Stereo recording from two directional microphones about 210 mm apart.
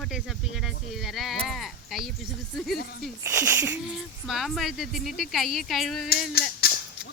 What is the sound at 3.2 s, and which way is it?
A woman's voice, 10° right (ahead or behind).